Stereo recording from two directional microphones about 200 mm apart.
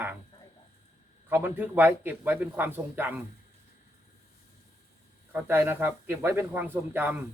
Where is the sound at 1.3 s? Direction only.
10° right (ahead or behind).